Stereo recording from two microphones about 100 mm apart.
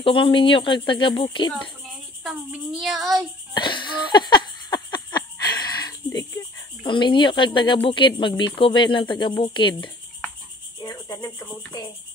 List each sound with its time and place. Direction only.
0.0 s speech: 60° left (ahead or behind)
2.8 s child singing: centre (ahead or behind)
3.5 s a sound: 50° left (ahead or behind)
6.8 s speech: 55° left (ahead or behind)
10.8 s music: 40° left (ahead or behind)